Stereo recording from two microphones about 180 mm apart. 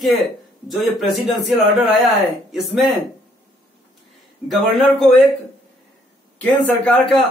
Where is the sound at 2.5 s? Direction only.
Centre (ahead or behind).